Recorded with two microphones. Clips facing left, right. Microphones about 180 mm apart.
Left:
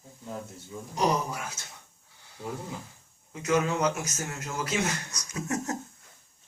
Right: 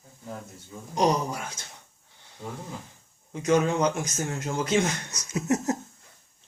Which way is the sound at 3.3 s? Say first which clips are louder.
Right 3 dB; 30° right (ahead or behind).